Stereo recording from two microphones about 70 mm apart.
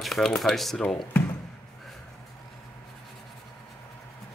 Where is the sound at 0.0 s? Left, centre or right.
Centre.